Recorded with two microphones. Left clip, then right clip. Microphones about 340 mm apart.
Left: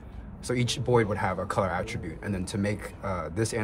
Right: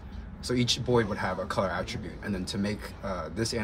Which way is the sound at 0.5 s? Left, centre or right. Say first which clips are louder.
Left 1 dB; left.